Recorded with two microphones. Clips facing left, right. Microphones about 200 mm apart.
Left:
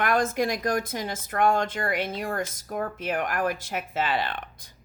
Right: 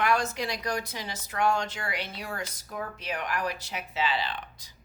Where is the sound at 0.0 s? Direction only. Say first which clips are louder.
Left 4 dB; 50° left (ahead or behind).